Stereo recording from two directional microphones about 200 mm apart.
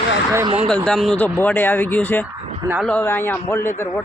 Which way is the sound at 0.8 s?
5° left (ahead or behind).